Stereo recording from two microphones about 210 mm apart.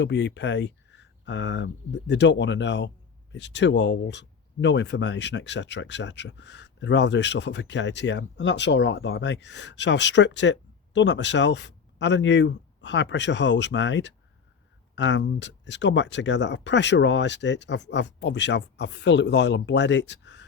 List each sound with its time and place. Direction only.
0.0 s speech: 55° left (ahead or behind)